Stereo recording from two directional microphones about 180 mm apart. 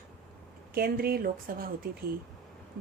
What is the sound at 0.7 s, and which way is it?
A woman's voice, 55° right (ahead or behind).